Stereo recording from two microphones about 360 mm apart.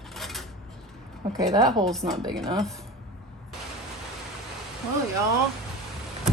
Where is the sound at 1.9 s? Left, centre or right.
Centre.